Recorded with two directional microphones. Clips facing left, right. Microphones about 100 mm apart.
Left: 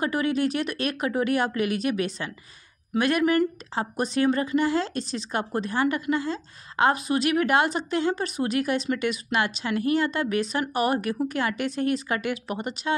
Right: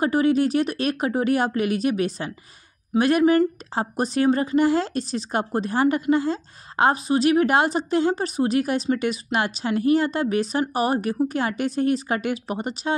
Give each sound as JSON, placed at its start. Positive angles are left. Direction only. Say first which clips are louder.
{"t": 0.0, "sound": "speech", "louder": "right 5 dB", "side_deg": -35}